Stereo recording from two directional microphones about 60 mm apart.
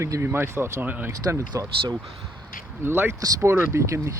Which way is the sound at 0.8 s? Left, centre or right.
Right.